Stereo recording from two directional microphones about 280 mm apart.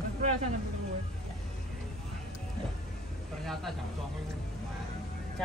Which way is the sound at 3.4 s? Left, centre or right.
Centre.